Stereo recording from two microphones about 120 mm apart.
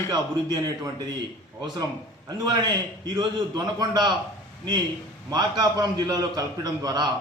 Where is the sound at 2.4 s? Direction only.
40° right (ahead or behind).